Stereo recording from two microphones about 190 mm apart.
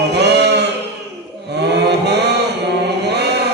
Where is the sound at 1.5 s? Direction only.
60° right (ahead or behind).